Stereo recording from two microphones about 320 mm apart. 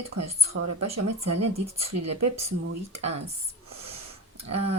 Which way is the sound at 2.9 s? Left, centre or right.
Centre.